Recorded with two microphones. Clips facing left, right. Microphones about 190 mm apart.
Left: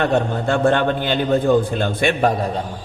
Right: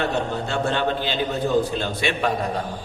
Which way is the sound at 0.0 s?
55° left (ahead or behind).